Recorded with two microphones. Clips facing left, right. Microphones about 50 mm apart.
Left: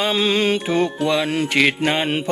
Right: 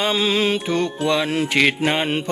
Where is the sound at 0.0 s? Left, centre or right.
Centre.